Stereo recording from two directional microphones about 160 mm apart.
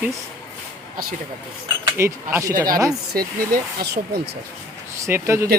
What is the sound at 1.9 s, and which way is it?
Speech, 15° right (ahead or behind).